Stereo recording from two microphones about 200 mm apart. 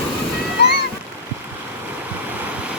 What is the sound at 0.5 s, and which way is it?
Splash, 55° left (ahead or behind).